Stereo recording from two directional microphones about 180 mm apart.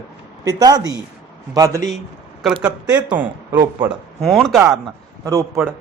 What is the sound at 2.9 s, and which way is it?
A man's voice, 10° right (ahead or behind).